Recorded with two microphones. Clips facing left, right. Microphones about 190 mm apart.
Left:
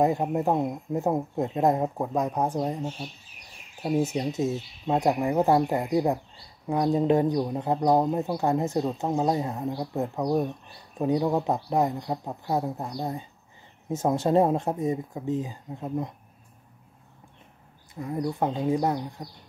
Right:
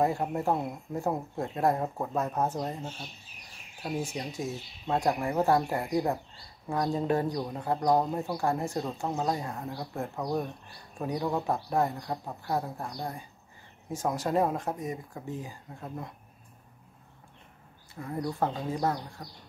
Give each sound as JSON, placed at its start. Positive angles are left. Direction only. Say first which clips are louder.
{"t": 0.0, "sound": "speech", "louder": "left 4 dB", "side_deg": 20}
{"t": 17.9, "sound": "speech", "louder": "left 4 dB", "side_deg": 15}